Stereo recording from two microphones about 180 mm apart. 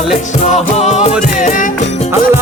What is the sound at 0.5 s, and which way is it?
Music, 40° left (ahead or behind).